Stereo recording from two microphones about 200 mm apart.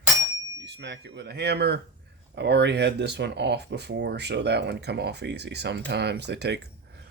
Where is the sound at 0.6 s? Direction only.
55° right (ahead or behind).